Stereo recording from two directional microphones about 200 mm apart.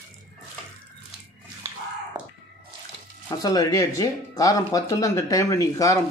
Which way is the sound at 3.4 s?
15° left (ahead or behind).